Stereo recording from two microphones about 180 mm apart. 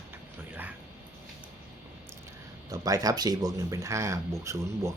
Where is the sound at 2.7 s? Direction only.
20° right (ahead or behind).